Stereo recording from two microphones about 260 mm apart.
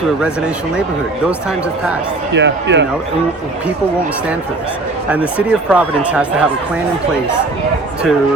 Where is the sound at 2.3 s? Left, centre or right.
Right.